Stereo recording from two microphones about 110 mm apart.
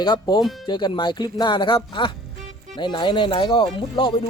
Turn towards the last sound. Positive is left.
turn(degrees=50)  # may be behind; listen again after turning